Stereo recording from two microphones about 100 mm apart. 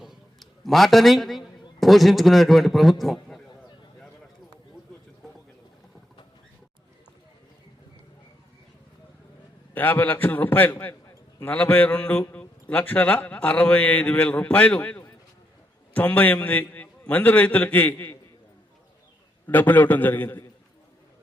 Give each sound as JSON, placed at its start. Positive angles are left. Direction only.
{"t": 0.0, "sound": "a man's voice", "side_deg": 0}
{"t": 9.7, "sound": "a man's voice", "side_deg": 20}
{"t": 19.5, "sound": "a man's voice", "side_deg": 20}